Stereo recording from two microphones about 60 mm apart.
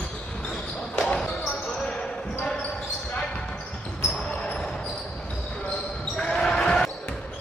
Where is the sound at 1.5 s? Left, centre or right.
Left.